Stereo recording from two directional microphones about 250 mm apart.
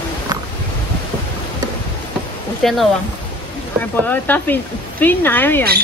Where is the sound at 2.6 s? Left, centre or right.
Centre.